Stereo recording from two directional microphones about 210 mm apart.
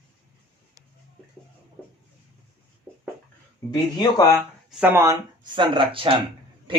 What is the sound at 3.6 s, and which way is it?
Speech, 15° left (ahead or behind).